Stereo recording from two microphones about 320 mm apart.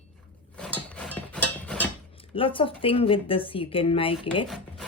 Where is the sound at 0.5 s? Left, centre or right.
Centre.